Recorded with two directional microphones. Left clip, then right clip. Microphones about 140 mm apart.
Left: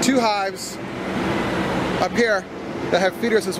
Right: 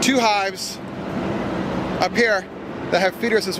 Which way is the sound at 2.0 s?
15° right (ahead or behind).